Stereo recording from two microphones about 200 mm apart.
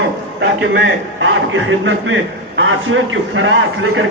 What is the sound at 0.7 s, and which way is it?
A man's voice, 65° right (ahead or behind).